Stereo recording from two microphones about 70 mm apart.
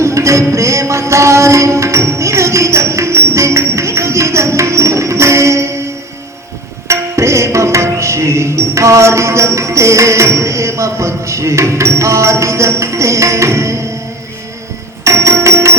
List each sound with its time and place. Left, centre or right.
0.0 s music: right
6.8 s tabla: right
15.0 s a sound: right